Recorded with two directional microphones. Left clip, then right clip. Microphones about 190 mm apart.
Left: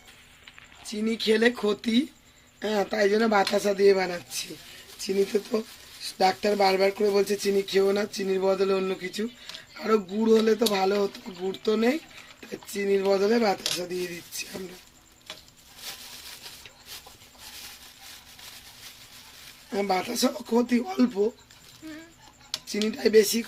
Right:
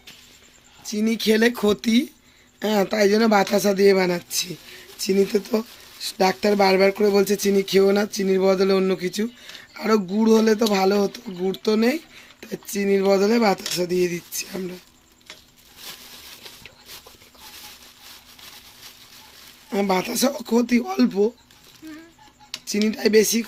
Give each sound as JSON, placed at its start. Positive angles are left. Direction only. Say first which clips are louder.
{"t": 0.9, "sound": "speech", "louder": "right 4 dB", "side_deg": -65}
{"t": 19.7, "sound": "speech", "louder": "right 4 dB", "side_deg": -60}
{"t": 21.8, "sound": "a sound", "louder": "right 2 dB", "side_deg": 0}
{"t": 22.6, "sound": "speech", "louder": "right 4 dB", "side_deg": -60}